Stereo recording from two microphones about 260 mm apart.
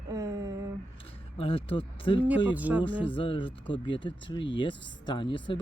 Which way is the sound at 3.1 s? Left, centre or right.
Centre.